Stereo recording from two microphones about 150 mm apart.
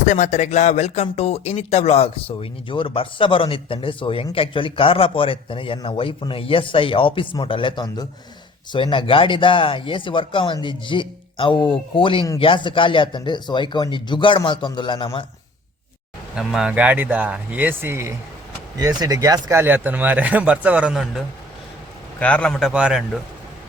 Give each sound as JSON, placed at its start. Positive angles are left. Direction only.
{"t": 0.0, "sound": "speech", "side_deg": 55}
{"t": 16.3, "sound": "speech", "side_deg": -5}
{"t": 22.2, "sound": "a man's voice", "side_deg": 10}
{"t": 22.7, "sound": "speech", "side_deg": -5}